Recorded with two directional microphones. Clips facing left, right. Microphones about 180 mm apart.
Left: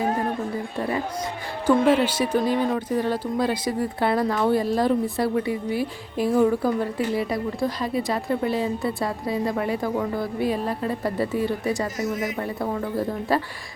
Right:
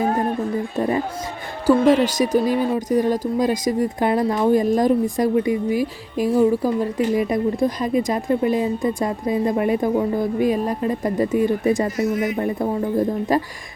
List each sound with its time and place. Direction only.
0.8 s a sound: 20° right (ahead or behind)
1.9 s speech: 40° right (ahead or behind)
2.5 s a woman's voice: 10° right (ahead or behind)